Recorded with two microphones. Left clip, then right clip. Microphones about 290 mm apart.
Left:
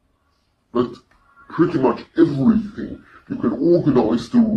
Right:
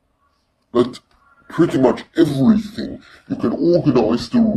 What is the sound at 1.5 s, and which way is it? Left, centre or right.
Speech, right.